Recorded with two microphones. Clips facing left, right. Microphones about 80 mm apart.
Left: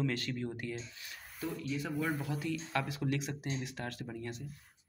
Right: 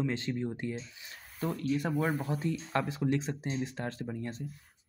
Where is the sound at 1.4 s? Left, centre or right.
Right.